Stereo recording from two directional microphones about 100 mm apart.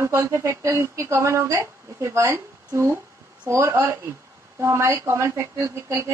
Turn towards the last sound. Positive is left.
turn(degrees=-30)  # may be behind; listen again after turning